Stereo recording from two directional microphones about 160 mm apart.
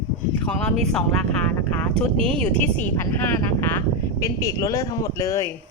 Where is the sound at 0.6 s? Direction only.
5° left (ahead or behind).